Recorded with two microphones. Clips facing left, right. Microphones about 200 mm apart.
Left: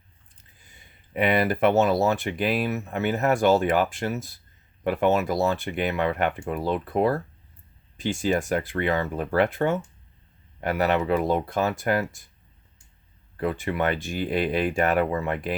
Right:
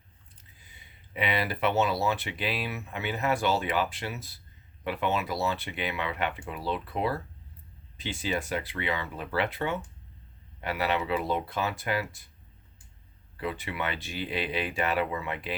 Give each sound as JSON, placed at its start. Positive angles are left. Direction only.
{"t": 0.6, "sound": "speech", "side_deg": 50}
{"t": 13.3, "sound": "speech", "side_deg": 50}